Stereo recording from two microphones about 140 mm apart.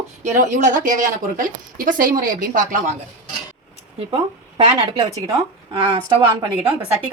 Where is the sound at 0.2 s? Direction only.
65° right (ahead or behind).